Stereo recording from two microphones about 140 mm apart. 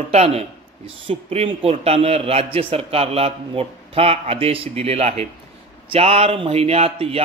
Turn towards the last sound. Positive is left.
turn(degrees=-45)  # may be behind; listen again after turning